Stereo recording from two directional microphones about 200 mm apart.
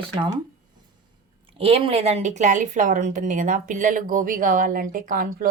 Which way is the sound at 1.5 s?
25° right (ahead or behind).